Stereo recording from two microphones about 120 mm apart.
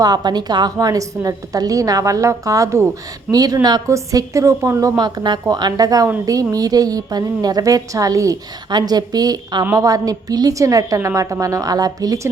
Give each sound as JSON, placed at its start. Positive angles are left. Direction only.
{"t": 0.0, "sound": "a woman's voice", "side_deg": -35}